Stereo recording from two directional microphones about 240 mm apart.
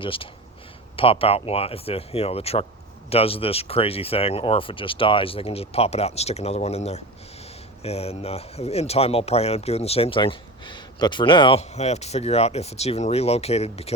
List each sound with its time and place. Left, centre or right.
0.0 s speech: left